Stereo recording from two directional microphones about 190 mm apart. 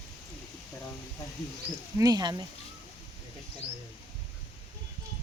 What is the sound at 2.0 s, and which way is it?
Speech, 20° right (ahead or behind).